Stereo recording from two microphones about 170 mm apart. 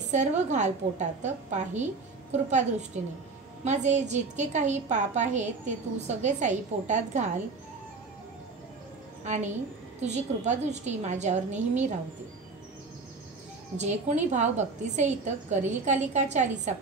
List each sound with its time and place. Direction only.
0.0 s a woman's voice: 45° right (ahead or behind)
9.2 s a woman's voice: 45° right (ahead or behind)
13.7 s a woman's voice: 45° right (ahead or behind)